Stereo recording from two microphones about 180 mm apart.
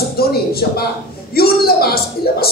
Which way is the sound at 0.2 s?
60° left (ahead or behind).